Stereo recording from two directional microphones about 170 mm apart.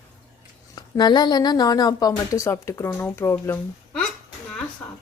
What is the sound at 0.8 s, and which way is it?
A woman's voice, 25° left (ahead or behind).